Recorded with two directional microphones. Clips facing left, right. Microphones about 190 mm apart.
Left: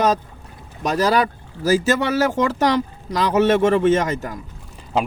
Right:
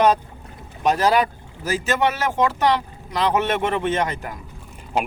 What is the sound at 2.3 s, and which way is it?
Speech, 40° left (ahead or behind).